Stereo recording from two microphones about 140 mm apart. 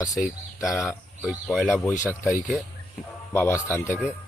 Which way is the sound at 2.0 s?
20° left (ahead or behind).